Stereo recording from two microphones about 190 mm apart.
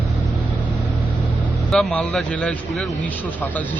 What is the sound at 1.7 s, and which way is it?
A woman's voice, 5° left (ahead or behind).